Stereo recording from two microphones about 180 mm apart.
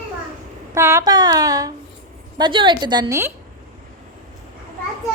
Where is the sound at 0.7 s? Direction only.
15° right (ahead or behind).